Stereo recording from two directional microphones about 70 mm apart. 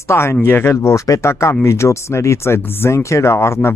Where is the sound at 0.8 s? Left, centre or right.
Left.